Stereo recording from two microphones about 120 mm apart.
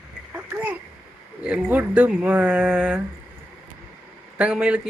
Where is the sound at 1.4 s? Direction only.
10° right (ahead or behind).